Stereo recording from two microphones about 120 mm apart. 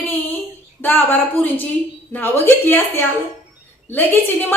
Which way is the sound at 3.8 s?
15° left (ahead or behind).